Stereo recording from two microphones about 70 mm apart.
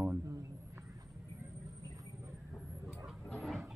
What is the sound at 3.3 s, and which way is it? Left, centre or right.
Chicken, centre.